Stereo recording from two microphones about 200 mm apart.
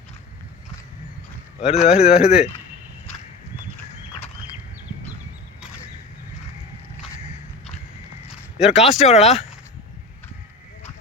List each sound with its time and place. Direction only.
1.6 s speech: 30° left (ahead or behind)
2.0 s speech: 5° right (ahead or behind)
8.3 s a sound: centre (ahead or behind)
8.7 s speech: 30° left (ahead or behind)